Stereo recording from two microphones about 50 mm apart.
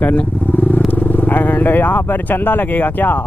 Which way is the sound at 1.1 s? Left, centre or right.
Left.